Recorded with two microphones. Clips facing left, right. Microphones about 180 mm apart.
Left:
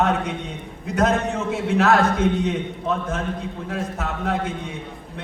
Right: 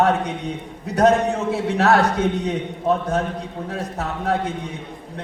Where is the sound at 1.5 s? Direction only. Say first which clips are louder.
Even; 35° right (ahead or behind).